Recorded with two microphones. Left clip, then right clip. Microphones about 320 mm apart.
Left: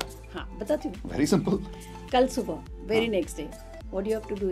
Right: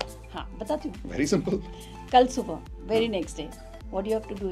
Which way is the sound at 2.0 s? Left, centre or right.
Centre.